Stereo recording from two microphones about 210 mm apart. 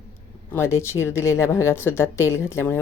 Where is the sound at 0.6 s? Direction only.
15° left (ahead or behind).